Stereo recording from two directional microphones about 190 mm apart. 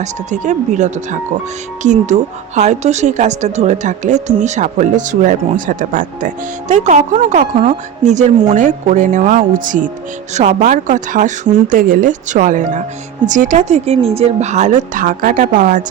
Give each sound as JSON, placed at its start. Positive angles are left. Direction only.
{"t": 0.0, "sound": "speech", "side_deg": -40}